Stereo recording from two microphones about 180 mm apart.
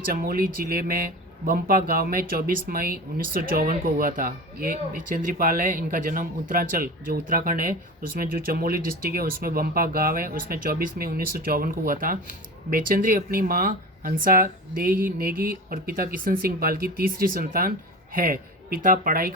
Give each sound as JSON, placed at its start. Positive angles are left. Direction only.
{"t": 0.1, "sound": "speech", "side_deg": -55}